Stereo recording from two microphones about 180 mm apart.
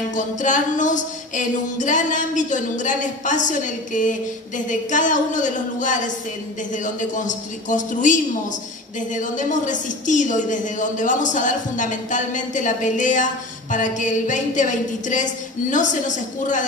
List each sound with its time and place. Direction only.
0.1 s a woman's voice: 45° left (ahead or behind)